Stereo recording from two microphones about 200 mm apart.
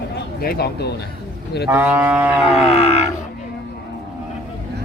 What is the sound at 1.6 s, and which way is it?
Livestock, 10° right (ahead or behind).